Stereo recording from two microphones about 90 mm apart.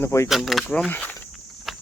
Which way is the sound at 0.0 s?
30° left (ahead or behind).